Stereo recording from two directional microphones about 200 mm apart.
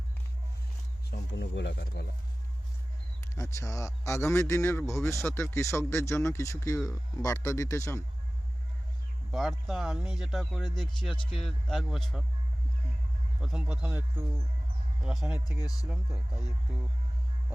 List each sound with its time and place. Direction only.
1.1 s speech: 65° left (ahead or behind)
3.2 s speech: 15° left (ahead or behind)
9.3 s speech: centre (ahead or behind)
13.4 s speech: 5° right (ahead or behind)